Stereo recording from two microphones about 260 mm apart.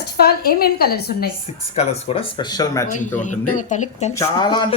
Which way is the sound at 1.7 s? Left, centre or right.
Left.